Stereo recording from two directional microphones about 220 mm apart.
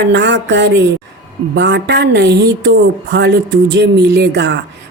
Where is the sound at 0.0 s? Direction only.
55° right (ahead or behind).